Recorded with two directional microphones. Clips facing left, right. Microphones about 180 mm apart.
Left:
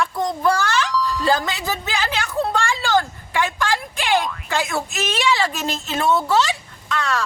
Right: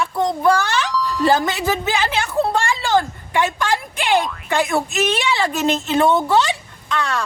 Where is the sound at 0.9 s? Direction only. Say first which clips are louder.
Even; centre (ahead or behind).